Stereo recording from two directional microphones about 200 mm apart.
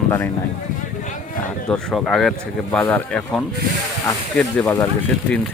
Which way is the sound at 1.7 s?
5° left (ahead or behind).